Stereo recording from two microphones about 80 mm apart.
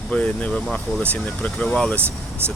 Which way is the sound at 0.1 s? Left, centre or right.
Centre.